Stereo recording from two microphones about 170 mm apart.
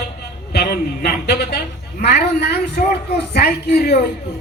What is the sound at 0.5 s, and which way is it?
A woman's voice, 70° left (ahead or behind).